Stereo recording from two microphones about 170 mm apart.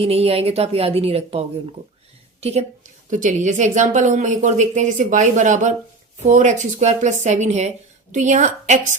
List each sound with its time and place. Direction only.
0.0 s a woman's voice: 35° right (ahead or behind)